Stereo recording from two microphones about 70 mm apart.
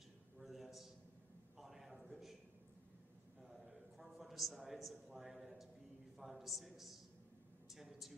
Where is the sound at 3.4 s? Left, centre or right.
Centre.